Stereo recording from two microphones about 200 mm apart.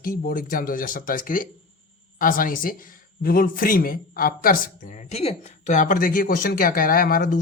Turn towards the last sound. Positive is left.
turn(degrees=45)  # may be behind; listen again after turning